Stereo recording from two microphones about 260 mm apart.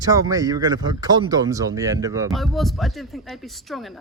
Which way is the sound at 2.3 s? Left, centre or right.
Centre.